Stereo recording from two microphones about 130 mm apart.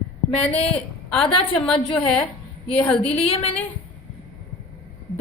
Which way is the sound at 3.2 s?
50° left (ahead or behind).